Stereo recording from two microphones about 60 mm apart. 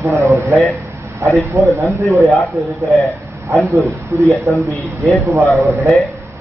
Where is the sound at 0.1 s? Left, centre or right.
Right.